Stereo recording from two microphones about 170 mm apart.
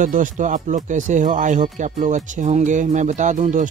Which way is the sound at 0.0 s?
50° right (ahead or behind).